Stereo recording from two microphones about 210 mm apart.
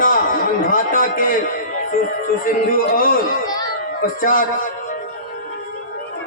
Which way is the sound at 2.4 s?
40° left (ahead or behind).